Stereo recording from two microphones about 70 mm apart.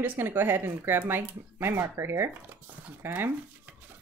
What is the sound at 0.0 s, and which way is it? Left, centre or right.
Speech, right.